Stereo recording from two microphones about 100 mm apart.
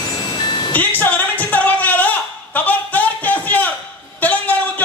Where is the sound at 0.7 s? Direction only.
15° left (ahead or behind).